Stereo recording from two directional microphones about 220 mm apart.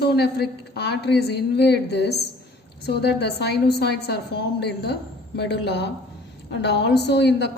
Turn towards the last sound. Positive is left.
turn(degrees=50)  # may be behind; listen again after turning